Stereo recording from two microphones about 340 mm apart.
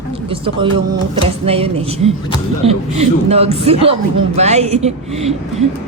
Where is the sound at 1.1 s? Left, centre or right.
Centre.